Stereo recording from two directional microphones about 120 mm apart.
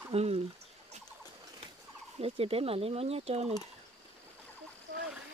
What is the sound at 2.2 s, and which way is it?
Speech, 55° right (ahead or behind).